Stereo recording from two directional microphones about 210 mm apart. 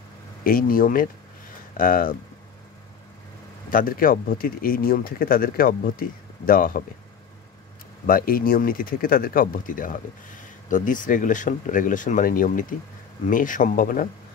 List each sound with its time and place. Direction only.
0.4 s speech: 40° left (ahead or behind)
3.7 s speech: 40° left (ahead or behind)
8.1 s speech: 45° left (ahead or behind)